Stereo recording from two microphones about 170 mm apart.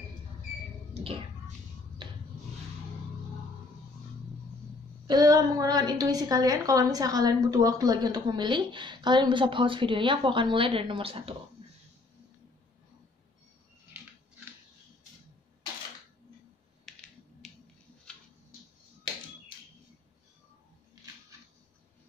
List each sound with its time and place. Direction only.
2.0 s rub: 30° right (ahead or behind)
5.0 s a woman's voice: 20° right (ahead or behind)
16.9 s a sound: centre (ahead or behind)
17.4 s scissors: centre (ahead or behind)